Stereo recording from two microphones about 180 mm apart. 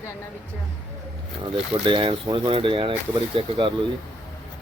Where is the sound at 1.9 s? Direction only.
25° right (ahead or behind).